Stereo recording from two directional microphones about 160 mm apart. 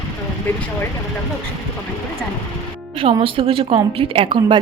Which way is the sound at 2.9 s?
35° right (ahead or behind).